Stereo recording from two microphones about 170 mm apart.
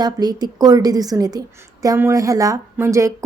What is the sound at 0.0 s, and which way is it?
A woman's voice, 25° right (ahead or behind).